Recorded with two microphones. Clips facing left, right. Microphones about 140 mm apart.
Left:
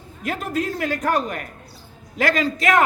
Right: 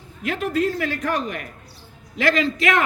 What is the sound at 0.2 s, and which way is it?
A man's voice, 40° left (ahead or behind).